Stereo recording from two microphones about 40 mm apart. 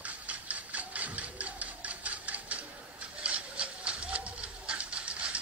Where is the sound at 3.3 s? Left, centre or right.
Right.